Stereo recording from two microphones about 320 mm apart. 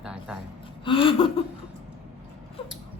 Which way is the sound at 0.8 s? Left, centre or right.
Centre.